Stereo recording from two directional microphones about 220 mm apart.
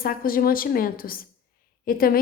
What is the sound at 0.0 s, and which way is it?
A woman's voice, 40° left (ahead or behind).